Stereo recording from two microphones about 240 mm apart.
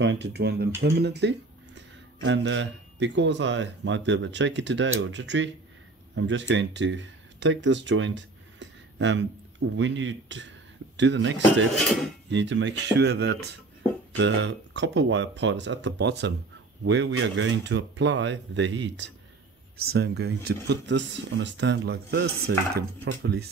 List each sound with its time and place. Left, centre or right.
0.0 s speech: right